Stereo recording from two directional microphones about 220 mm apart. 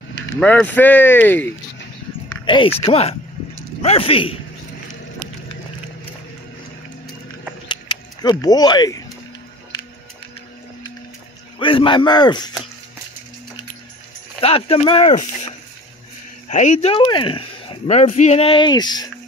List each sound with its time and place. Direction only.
0.3 s speech: 5° left (ahead or behind)
2.4 s speech: 20° left (ahead or behind)
7.6 s a sound: 20° left (ahead or behind)
11.6 s speech: 20° left (ahead or behind)
14.4 s speech: 25° left (ahead or behind)